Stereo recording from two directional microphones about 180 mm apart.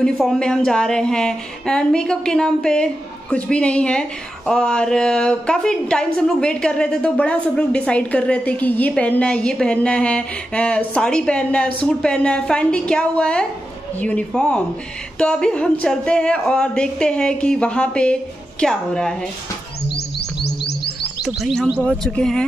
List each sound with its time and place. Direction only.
0.0 s a woman's voice: 5° left (ahead or behind)
20.2 s music: 65° left (ahead or behind)
21.3 s a woman's voice: centre (ahead or behind)